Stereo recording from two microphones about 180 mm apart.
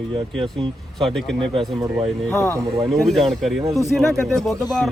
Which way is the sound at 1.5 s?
20° right (ahead or behind).